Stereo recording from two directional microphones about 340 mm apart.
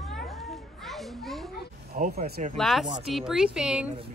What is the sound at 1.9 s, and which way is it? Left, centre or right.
Speech, right.